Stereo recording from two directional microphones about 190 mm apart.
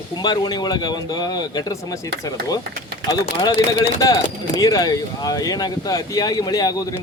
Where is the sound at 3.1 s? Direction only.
20° left (ahead or behind).